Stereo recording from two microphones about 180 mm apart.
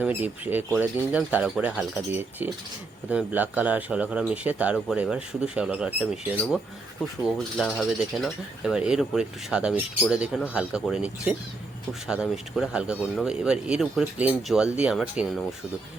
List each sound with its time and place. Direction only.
0.0 s speech: 10° right (ahead or behind)